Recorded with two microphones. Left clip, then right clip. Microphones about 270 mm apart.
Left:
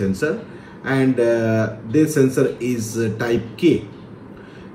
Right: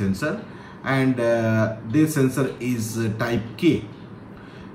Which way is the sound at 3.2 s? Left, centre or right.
Right.